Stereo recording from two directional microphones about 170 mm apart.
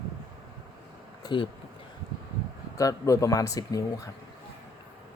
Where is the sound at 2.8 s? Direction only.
20° left (ahead or behind).